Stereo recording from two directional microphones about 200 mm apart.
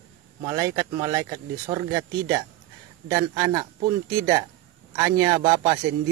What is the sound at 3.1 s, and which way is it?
Speech, 20° right (ahead or behind).